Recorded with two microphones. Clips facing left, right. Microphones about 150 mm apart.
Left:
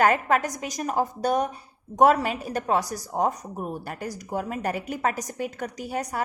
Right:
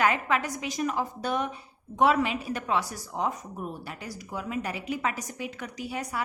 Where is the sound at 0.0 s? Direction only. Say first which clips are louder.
Left 4 dB; 45° left (ahead or behind).